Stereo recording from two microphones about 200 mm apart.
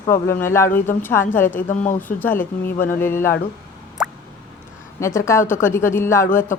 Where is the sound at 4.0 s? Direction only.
5° right (ahead or behind).